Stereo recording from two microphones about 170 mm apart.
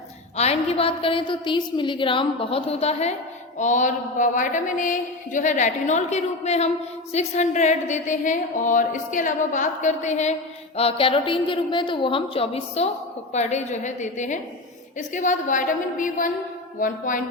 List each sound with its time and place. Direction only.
0.3 s a woman's voice: 40° left (ahead or behind)
10.8 s a woman's voice: 35° left (ahead or behind); by 17.2 s 50° left (ahead or behind)